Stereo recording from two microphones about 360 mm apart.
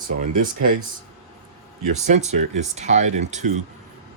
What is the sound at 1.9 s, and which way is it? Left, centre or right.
Speech, centre.